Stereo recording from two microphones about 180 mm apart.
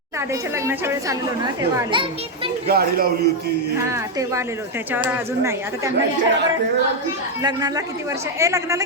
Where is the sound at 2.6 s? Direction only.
60° right (ahead or behind).